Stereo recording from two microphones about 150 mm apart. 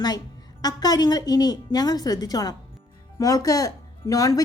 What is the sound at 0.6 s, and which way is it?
A woman's voice, 25° left (ahead or behind).